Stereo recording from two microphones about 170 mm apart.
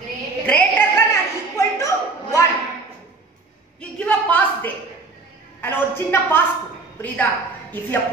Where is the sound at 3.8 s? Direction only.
5° left (ahead or behind).